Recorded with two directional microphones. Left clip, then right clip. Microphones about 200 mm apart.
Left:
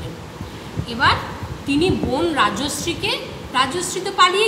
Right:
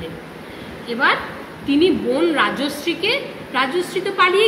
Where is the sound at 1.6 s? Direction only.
20° left (ahead or behind).